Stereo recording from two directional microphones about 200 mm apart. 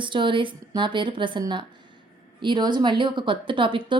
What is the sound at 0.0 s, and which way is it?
Speech, 25° right (ahead or behind).